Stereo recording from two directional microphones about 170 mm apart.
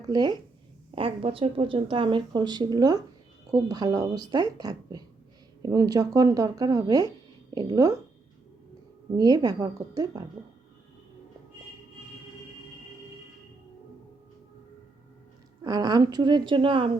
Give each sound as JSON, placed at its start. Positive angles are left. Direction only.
{"t": 0.0, "sound": "speech", "side_deg": -25}
{"t": 9.1, "sound": "speech", "side_deg": -25}
{"t": 15.6, "sound": "speech", "side_deg": -20}